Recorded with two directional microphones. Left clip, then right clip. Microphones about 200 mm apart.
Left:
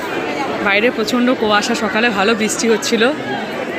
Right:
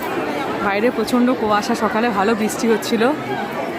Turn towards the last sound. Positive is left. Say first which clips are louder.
# left 3 dB
turn(degrees=-10)  # may be behind; listen again after turning